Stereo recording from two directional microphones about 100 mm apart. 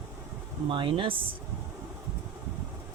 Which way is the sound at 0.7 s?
60° right (ahead or behind).